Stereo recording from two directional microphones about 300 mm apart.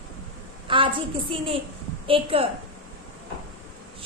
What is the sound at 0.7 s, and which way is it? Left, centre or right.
A woman's voice, centre.